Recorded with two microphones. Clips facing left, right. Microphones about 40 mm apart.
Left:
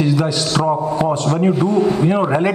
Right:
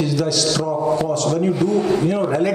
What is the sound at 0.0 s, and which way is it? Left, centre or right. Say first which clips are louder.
A man's voice: left 2 dB; left.